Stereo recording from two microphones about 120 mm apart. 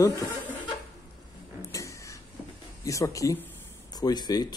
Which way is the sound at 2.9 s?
25° left (ahead or behind).